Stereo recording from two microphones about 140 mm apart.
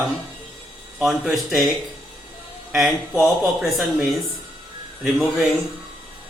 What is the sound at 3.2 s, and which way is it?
Speech, centre (ahead or behind).